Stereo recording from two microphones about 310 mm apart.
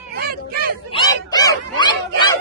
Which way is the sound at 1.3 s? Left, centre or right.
Centre.